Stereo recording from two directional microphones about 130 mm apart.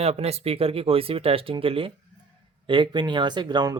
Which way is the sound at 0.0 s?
55° right (ahead or behind).